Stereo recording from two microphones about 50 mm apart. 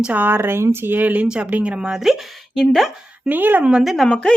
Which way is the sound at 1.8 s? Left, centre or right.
Centre.